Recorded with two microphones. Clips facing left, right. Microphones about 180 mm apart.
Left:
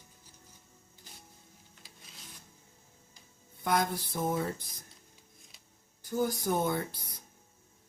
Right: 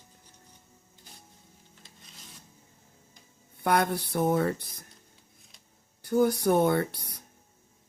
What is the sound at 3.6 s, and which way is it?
Speech, 65° right (ahead or behind).